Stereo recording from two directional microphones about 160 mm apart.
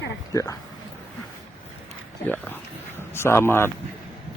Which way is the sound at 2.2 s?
10° left (ahead or behind).